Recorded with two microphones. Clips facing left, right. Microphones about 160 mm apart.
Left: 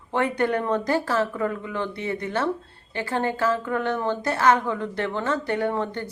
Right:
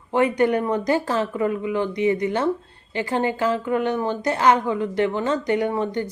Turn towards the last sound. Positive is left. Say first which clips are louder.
# right 3 dB
turn(degrees=-15)  # may be behind; listen again after turning